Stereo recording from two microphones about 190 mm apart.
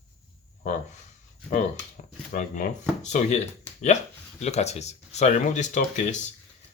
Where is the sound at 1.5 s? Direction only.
40° left (ahead or behind).